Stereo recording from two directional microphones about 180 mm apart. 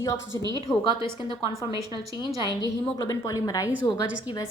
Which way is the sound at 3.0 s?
20° left (ahead or behind).